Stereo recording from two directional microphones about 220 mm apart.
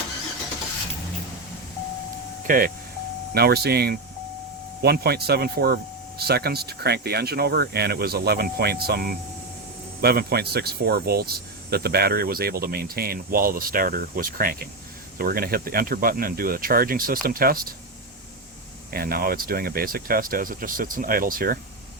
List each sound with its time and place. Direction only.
2.5 s speech: 40° right (ahead or behind)
18.9 s speech: 45° right (ahead or behind)